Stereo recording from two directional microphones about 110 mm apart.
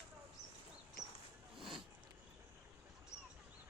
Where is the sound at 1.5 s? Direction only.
Centre (ahead or behind).